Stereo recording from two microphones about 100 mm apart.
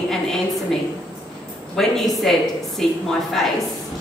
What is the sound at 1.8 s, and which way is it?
A woman's voice, centre (ahead or behind).